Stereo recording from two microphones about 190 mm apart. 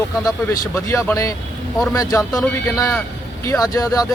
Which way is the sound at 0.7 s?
15° left (ahead or behind).